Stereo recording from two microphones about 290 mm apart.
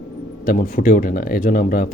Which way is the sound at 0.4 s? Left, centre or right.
Left.